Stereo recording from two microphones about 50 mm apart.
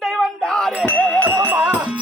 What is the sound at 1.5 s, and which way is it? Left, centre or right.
Music, right.